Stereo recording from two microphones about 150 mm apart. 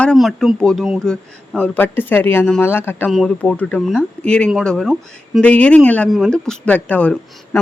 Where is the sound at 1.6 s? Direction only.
15° left (ahead or behind).